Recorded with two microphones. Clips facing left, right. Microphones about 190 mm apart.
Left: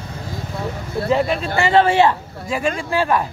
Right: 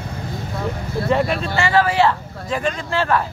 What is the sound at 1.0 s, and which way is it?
Speech, centre (ahead or behind).